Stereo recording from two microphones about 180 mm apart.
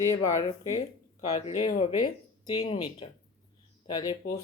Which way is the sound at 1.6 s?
35° left (ahead or behind).